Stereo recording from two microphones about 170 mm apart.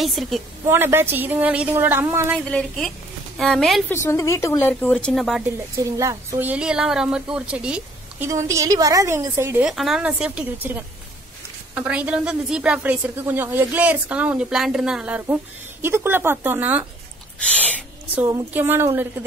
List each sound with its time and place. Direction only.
0.0 s speech: centre (ahead or behind)
0.7 s a woman's voice: 15° right (ahead or behind)
2.3 s speech: 5° left (ahead or behind)
3.9 s speech: 15° left (ahead or behind); by 5.4 s centre (ahead or behind)
5.9 s speech: 20° right (ahead or behind)
8.3 s a woman's voice: 20° right (ahead or behind)
9.7 s a woman's voice: centre (ahead or behind)
17.4 s speech: 10° left (ahead or behind)
18.1 s a woman's voice: 15° right (ahead or behind)